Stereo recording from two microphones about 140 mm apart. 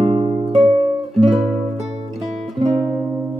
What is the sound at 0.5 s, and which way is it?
Music, centre (ahead or behind).